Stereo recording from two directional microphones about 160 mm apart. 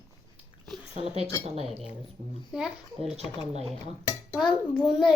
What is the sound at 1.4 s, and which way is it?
Speech, 40° right (ahead or behind).